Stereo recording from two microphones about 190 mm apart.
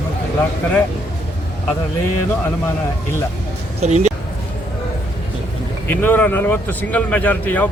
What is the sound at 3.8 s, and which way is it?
Speech, 35° right (ahead or behind).